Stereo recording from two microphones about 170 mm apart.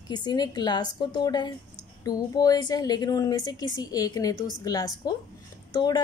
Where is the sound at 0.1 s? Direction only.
25° left (ahead or behind).